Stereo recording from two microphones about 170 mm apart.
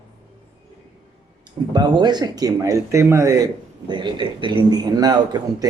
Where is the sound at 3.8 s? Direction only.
25° right (ahead or behind).